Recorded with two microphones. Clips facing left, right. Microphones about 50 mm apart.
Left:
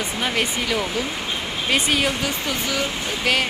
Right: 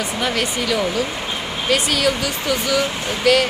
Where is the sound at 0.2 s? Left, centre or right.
Centre.